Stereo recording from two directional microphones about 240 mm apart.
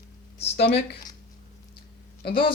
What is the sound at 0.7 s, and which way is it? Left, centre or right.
Speech, centre.